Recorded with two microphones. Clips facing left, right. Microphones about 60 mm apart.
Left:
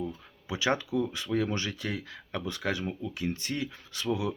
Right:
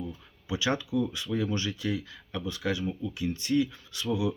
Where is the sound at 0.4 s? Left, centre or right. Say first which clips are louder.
Even; left.